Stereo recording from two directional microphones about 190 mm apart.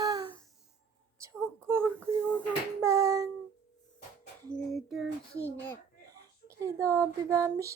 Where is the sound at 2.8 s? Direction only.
15° right (ahead or behind).